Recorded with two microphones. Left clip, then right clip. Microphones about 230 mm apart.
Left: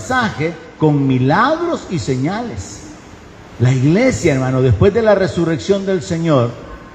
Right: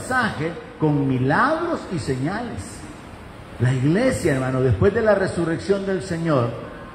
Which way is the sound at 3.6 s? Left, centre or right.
Left.